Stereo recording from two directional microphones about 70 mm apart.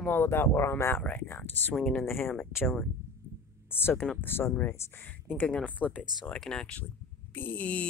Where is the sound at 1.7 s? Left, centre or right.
Centre.